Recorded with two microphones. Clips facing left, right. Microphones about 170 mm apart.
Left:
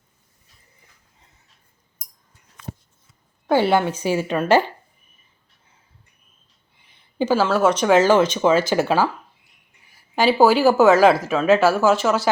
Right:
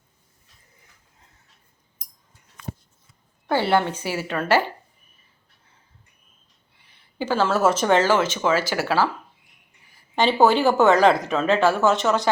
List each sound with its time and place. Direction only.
3.4 s a woman's voice: 15° left (ahead or behind)
7.2 s a sound: 10° left (ahead or behind)
7.4 s speech: 5° right (ahead or behind)
7.9 s a woman's voice: 15° left (ahead or behind)
10.2 s speech: centre (ahead or behind)